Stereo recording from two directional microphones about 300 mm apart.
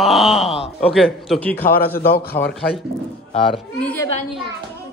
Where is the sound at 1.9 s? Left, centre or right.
Left.